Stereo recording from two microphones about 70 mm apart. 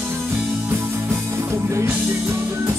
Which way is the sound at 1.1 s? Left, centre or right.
Right.